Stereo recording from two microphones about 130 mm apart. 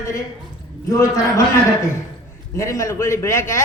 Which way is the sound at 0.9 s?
25° left (ahead or behind).